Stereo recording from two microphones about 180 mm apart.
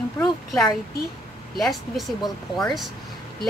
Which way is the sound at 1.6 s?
Centre (ahead or behind).